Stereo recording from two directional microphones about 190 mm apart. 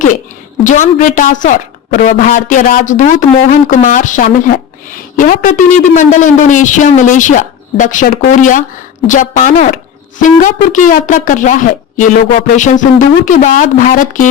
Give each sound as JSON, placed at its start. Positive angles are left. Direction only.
{"t": 0.6, "sound": "a woman's voice", "side_deg": 40}